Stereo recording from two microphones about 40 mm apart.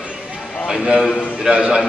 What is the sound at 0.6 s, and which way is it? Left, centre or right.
A man's voice, centre.